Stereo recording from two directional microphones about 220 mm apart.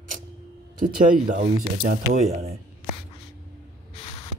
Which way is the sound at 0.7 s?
35° right (ahead or behind).